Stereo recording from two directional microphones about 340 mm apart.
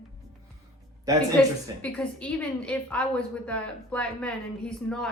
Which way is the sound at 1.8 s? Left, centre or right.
Centre.